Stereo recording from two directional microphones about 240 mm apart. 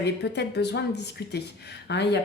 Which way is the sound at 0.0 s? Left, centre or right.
Left.